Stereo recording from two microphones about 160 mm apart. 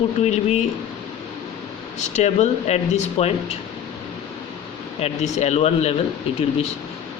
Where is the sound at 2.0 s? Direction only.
45° left (ahead or behind).